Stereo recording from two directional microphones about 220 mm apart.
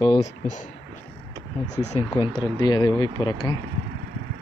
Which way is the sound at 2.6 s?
20° left (ahead or behind).